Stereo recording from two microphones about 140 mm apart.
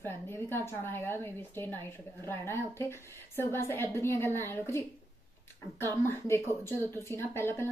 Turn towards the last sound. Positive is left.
turn(degrees=15)  # may be behind; listen again after turning